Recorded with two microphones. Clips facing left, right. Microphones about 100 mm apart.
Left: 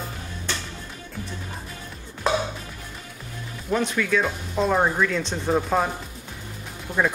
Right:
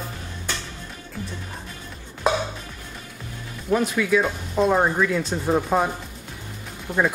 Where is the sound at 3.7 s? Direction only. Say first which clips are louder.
Right 3 dB; 5° right (ahead or behind).